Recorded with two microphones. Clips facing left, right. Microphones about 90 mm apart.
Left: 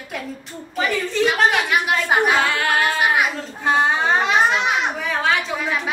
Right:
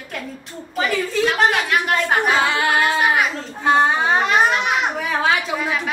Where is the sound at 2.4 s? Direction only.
15° right (ahead or behind).